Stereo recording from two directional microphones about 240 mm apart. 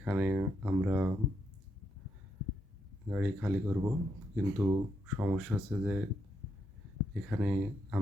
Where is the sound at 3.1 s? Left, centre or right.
Centre.